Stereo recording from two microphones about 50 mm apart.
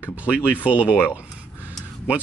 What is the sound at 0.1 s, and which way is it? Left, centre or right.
Speech, right.